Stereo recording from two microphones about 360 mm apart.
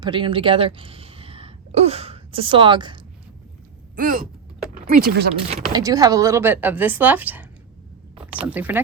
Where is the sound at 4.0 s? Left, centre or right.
Right.